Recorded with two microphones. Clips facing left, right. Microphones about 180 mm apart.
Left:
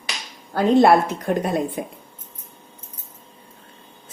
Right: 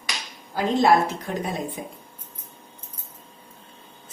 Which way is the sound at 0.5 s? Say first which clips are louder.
Left 5 dB; 60° left (ahead or behind).